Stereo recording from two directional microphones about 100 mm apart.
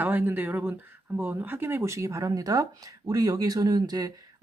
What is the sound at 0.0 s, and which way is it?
Speech, 20° right (ahead or behind).